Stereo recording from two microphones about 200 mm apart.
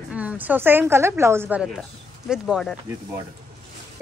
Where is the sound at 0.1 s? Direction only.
5° right (ahead or behind).